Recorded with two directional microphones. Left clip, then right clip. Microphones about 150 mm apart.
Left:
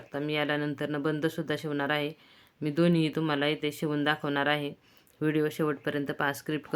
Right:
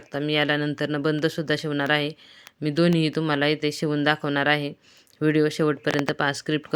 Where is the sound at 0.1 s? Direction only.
30° right (ahead or behind).